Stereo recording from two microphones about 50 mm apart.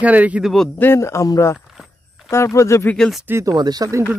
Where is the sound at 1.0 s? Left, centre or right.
Left.